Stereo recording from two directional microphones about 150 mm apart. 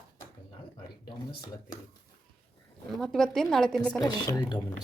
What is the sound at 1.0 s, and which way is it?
Speech, 30° left (ahead or behind).